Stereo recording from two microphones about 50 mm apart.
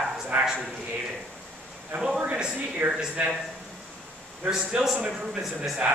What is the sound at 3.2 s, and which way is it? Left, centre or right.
Speech, right.